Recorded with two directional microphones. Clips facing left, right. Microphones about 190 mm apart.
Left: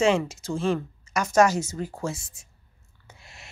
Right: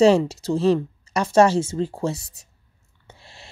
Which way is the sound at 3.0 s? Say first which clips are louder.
Right 3 dB; 30° right (ahead or behind).